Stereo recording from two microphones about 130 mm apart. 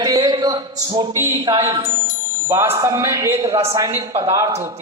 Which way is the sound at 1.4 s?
40° right (ahead or behind).